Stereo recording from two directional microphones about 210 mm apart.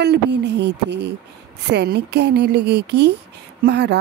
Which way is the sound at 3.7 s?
55° right (ahead or behind).